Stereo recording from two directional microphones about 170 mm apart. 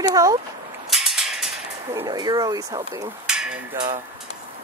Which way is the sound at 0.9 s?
Centre (ahead or behind).